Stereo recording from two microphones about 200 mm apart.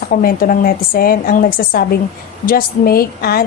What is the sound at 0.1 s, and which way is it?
A woman's voice, 45° left (ahead or behind).